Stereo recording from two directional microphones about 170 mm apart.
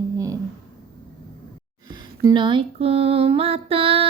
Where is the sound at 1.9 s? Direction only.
25° right (ahead or behind).